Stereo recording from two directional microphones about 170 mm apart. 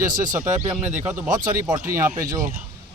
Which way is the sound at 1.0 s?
15° right (ahead or behind).